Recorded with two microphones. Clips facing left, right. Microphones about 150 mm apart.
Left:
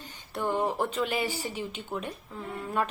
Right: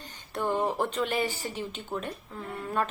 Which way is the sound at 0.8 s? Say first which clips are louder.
Right 1 dB; 5° left (ahead or behind).